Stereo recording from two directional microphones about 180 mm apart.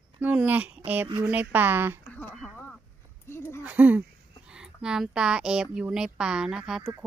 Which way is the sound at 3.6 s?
10° right (ahead or behind).